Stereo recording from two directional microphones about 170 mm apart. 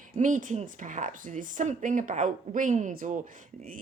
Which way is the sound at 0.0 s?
50° right (ahead or behind).